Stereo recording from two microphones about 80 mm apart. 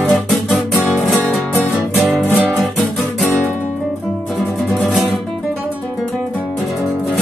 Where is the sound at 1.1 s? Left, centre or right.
Left.